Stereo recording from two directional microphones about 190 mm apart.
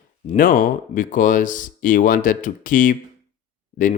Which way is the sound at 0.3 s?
45° left (ahead or behind).